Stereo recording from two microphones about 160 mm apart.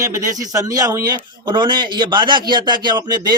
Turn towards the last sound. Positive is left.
turn(degrees=-25)  # may be behind; listen again after turning